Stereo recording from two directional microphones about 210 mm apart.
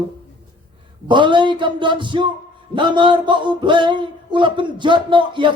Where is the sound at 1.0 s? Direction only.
20° right (ahead or behind).